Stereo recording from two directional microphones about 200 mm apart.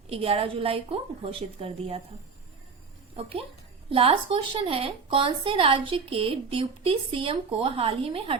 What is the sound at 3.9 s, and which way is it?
A woman's voice, 25° right (ahead or behind).